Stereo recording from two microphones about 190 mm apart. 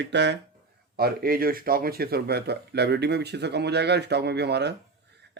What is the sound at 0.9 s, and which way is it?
Speech, 50° right (ahead or behind).